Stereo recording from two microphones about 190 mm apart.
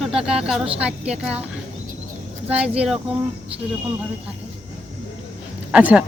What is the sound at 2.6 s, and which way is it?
Speech, 5° right (ahead or behind).